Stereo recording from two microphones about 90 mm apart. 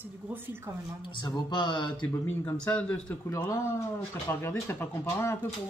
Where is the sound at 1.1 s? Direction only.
55° left (ahead or behind).